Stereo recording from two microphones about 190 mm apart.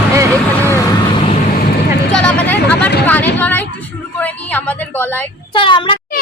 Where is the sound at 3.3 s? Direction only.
10° left (ahead or behind).